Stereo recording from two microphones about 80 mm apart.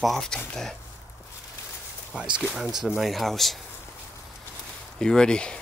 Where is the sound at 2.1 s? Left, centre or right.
Centre.